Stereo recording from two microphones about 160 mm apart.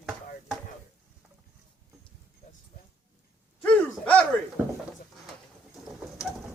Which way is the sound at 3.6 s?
10° left (ahead or behind).